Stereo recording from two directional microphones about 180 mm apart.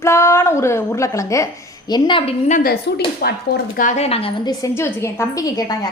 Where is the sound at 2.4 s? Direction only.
50° left (ahead or behind).